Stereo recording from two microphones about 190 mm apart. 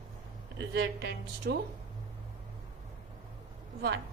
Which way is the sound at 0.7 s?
65° right (ahead or behind).